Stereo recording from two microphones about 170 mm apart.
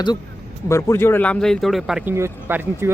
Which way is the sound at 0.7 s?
15° left (ahead or behind).